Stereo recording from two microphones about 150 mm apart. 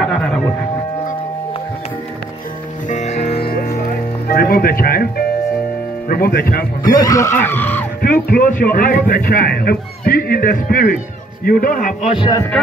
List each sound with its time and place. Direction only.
2.9 s music: 50° left (ahead or behind)
3.3 s music: 80° left
6.0 s a man's voice: 80° left
6.8 s speech: 25° left (ahead or behind)
8.0 s a man's voice: 80° left
12.2 s speech: 25° left (ahead or behind)